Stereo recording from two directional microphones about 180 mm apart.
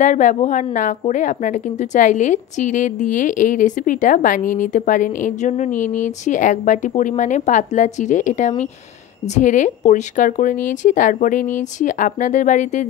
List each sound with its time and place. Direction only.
0.0 s a woman's voice: 45° left (ahead or behind)